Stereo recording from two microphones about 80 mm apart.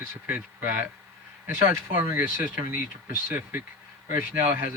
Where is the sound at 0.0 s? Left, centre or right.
Right.